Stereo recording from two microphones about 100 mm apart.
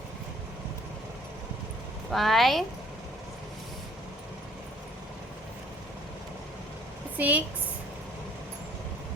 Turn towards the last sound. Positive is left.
turn(degrees=-15)  # may be behind; listen again after turning